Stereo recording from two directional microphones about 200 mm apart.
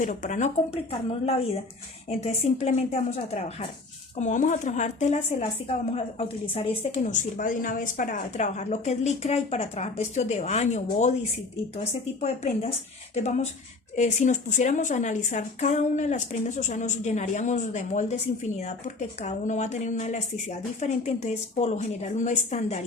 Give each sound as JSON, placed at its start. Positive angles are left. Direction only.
{"t": 0.0, "sound": "speech", "side_deg": 40}